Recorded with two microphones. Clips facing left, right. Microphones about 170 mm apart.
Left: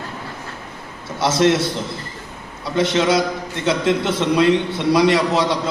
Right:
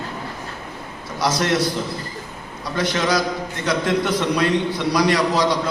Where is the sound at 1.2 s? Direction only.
25° left (ahead or behind).